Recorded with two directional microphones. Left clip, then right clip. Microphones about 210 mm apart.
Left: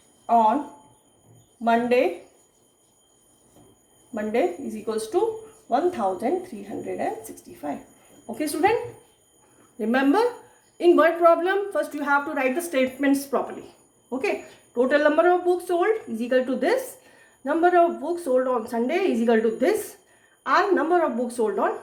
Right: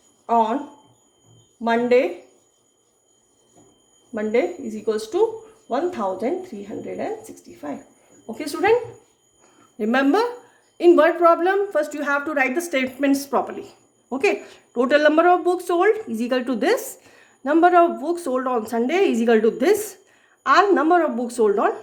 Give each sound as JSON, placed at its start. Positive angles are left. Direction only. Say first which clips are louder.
{"t": 0.3, "sound": "speech", "louder": "even", "side_deg": -40}
{"t": 1.6, "sound": "a woman's voice", "louder": "right 2 dB", "side_deg": -40}
{"t": 4.1, "sound": "a woman's voice", "louder": "right 3 dB", "side_deg": -35}
{"t": 8.3, "sound": "a woman's voice", "louder": "right 1 dB", "side_deg": -35}
{"t": 9.7, "sound": "a woman's voice", "louder": "right 2 dB", "side_deg": -30}